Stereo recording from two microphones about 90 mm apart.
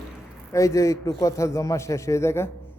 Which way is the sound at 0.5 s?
35° left (ahead or behind).